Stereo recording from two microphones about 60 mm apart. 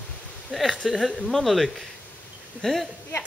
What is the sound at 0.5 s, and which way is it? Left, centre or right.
Speech, centre.